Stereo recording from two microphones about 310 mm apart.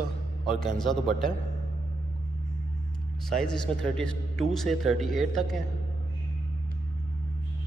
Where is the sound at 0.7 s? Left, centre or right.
Centre.